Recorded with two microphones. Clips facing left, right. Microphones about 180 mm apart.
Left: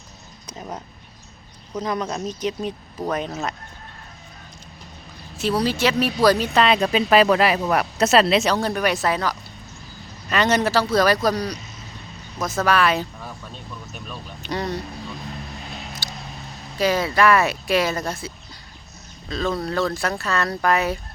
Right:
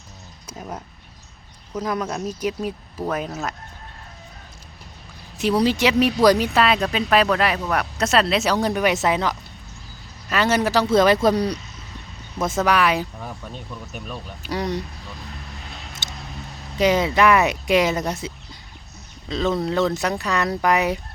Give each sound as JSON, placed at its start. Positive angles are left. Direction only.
{"t": 0.4, "sound": "a sound", "side_deg": -5}
{"t": 1.7, "sound": "speech", "side_deg": -5}
{"t": 5.4, "sound": "speech", "side_deg": -15}
{"t": 6.6, "sound": "speech", "side_deg": 0}
{"t": 8.4, "sound": "speech", "side_deg": -15}
{"t": 10.2, "sound": "speech", "side_deg": -5}
{"t": 16.0, "sound": "a sound", "side_deg": -25}
{"t": 16.7, "sound": "speech", "side_deg": -20}